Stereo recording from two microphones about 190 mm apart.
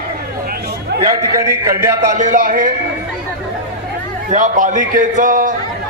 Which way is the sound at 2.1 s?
45° right (ahead or behind).